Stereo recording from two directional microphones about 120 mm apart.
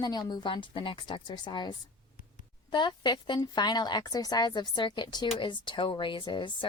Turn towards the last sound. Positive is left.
turn(degrees=40)  # may be behind; listen again after turning